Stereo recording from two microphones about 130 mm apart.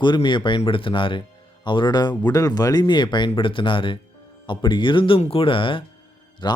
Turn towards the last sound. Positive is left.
turn(degrees=35)  # may be behind; listen again after turning